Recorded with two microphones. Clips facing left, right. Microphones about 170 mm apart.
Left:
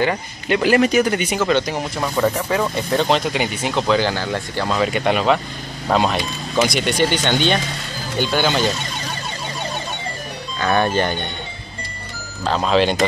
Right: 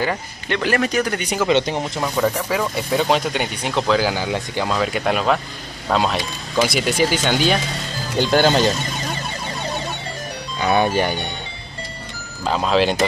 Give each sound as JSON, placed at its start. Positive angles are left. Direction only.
{"t": 0.5, "sound": "speech", "side_deg": 10}
{"t": 1.5, "sound": "speech", "side_deg": -25}
{"t": 1.8, "sound": "speech", "side_deg": -5}
{"t": 4.1, "sound": "speech", "side_deg": -10}
{"t": 4.7, "sound": "speech", "side_deg": 0}
{"t": 8.2, "sound": "speech", "side_deg": -40}
{"t": 10.6, "sound": "speech", "side_deg": -15}
{"t": 12.4, "sound": "speech", "side_deg": -5}